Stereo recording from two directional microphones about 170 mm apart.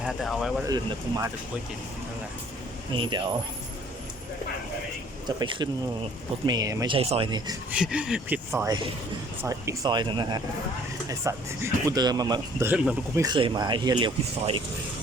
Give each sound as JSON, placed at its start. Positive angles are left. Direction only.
{"t": 0.0, "sound": "speech", "side_deg": 0}
{"t": 0.7, "sound": "speech", "side_deg": -20}
{"t": 2.9, "sound": "speech", "side_deg": -30}
{"t": 5.4, "sound": "speech", "side_deg": -30}
{"t": 6.9, "sound": "speech", "side_deg": -35}
{"t": 7.7, "sound": "speech", "side_deg": -5}
{"t": 13.2, "sound": "speech", "side_deg": -30}